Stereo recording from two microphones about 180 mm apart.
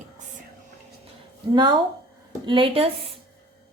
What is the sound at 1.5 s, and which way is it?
A woman's voice, 25° right (ahead or behind).